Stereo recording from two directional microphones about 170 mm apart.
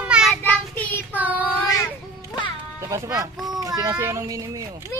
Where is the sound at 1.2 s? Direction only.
10° right (ahead or behind).